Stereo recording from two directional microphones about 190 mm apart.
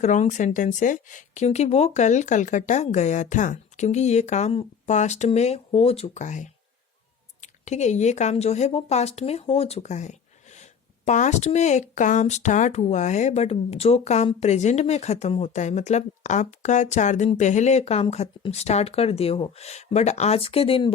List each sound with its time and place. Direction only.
0.0 s speech: 40° left (ahead or behind)